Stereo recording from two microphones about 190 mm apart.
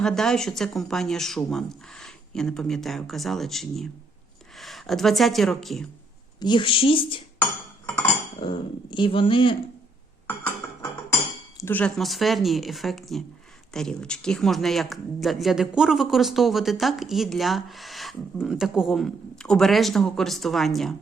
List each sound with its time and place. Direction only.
0.0 s speech: 5° left (ahead or behind)
6.4 s speech: 25° left (ahead or behind)
7.9 s cutlery: 10° left (ahead or behind)
8.4 s speech: 25° left (ahead or behind)
11.5 s speech: 10° left (ahead or behind)